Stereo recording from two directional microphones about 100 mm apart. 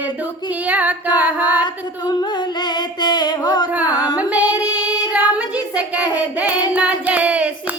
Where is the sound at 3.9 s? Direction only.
40° left (ahead or behind).